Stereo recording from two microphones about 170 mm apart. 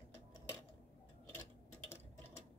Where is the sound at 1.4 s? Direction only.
15° left (ahead or behind).